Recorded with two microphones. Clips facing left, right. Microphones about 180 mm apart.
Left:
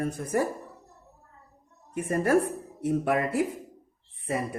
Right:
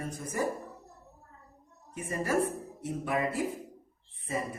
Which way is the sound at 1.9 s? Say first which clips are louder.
Left 7 dB; 60° left (ahead or behind).